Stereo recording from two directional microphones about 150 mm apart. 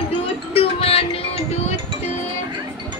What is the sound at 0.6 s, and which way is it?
Music, 40° left (ahead or behind).